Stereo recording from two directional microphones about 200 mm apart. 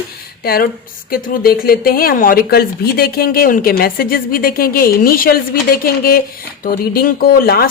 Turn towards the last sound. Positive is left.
turn(degrees=50)  # may be behind; listen again after turning